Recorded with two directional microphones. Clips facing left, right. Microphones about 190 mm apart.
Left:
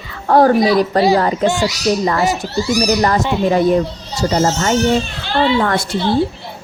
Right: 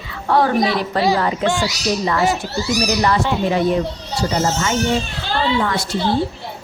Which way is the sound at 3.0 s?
45° left (ahead or behind).